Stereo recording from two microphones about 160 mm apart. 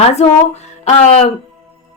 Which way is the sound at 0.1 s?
45° left (ahead or behind).